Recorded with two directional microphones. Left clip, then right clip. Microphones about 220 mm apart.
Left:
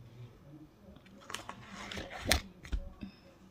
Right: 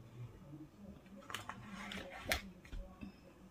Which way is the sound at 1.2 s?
50° left (ahead or behind).